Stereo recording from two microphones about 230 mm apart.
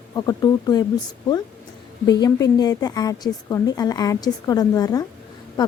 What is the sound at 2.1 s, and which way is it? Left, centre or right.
A woman's voice, centre.